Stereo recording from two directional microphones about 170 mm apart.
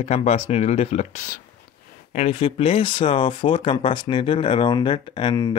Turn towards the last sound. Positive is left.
turn(degrees=25)  # may be behind; listen again after turning